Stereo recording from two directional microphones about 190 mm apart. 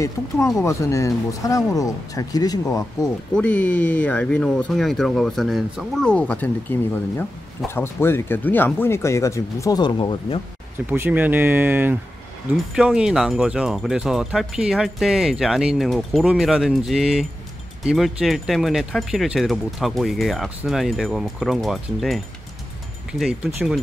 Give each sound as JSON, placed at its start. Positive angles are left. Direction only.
{"t": 0.7, "sound": "speech", "side_deg": 15}
{"t": 3.3, "sound": "speech", "side_deg": 10}
{"t": 10.9, "sound": "speech", "side_deg": -10}